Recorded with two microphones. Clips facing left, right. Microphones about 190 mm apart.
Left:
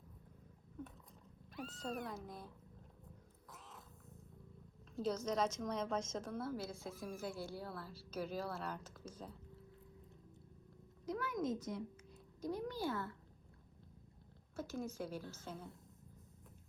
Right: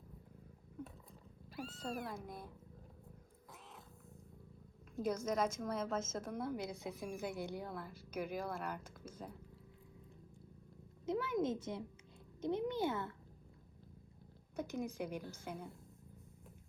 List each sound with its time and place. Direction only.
1.6 s speech: 10° right (ahead or behind)
4.9 s speech: 10° right (ahead or behind)
11.0 s a child's voice: 25° right (ahead or behind)
14.5 s speech: 20° right (ahead or behind)